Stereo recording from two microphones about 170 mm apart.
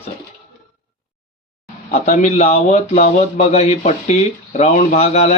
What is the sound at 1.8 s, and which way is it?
Speech, 60° left (ahead or behind).